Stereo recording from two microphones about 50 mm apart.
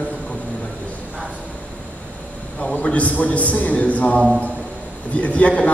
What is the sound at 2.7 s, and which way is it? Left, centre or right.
A man's voice, left.